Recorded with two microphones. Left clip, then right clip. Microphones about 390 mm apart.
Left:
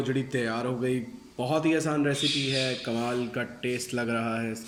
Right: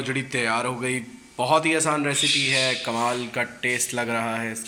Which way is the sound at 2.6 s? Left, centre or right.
Right.